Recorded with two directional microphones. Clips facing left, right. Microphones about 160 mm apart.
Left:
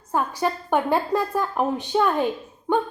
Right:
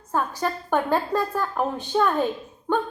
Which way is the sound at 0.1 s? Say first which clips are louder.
Left 2 dB; 15° left (ahead or behind).